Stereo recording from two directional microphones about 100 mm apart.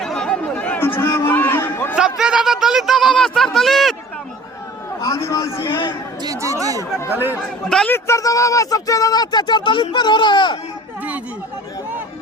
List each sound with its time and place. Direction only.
0.0 s chatter: 5° left (ahead or behind)
0.8 s a sound: 20° left (ahead or behind)
2.0 s a sound: 5° right (ahead or behind)
4.9 s a man's voice: 35° left (ahead or behind)
6.2 s speech: 35° right (ahead or behind)
7.1 s speech: 20° right (ahead or behind)
7.6 s a man's voice: 5° left (ahead or behind)
7.9 s speech: 25° left (ahead or behind); by 10.6 s 50° left (ahead or behind)